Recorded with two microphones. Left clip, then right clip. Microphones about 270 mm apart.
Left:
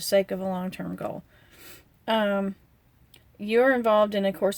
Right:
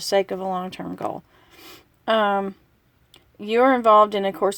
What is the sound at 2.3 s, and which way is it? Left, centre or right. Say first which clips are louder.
Speech: right 5 dB; right.